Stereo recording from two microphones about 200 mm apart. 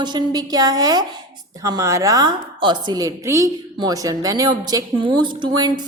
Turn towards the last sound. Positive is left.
turn(degrees=-20)  # may be behind; listen again after turning